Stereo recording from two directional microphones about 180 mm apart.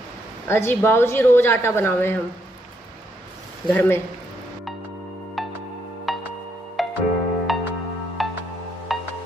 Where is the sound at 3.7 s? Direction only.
10° left (ahead or behind).